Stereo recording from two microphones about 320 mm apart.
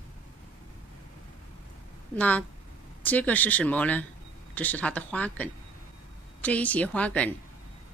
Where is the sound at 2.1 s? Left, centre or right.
Centre.